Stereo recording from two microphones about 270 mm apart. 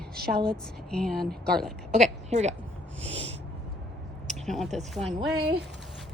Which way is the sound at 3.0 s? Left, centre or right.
Right.